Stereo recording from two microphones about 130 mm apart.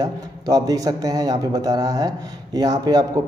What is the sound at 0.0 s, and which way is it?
A man's voice, 30° right (ahead or behind).